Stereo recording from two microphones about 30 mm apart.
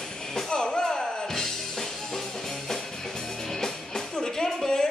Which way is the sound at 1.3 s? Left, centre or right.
Centre.